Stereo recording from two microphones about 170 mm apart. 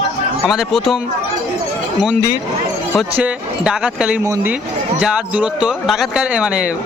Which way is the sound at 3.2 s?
5° right (ahead or behind).